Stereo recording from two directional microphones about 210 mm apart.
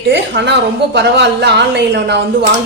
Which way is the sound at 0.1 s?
55° right (ahead or behind).